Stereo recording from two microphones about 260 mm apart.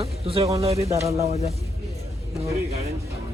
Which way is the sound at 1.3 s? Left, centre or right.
Left.